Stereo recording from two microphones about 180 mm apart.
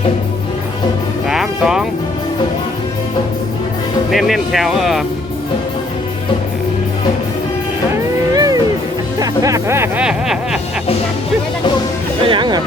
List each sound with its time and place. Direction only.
1.3 s music: 5° right (ahead or behind)
4.1 s speech: centre (ahead or behind)
8.4 s music: 20° right (ahead or behind); by 10.6 s 5° right (ahead or behind)
12.2 s speech: 25° right (ahead or behind)